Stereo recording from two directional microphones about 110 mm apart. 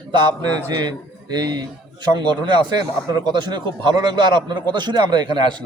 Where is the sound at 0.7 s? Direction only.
40° right (ahead or behind).